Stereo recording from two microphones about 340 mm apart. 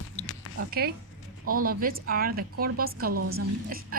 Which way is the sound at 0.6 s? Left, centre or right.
Right.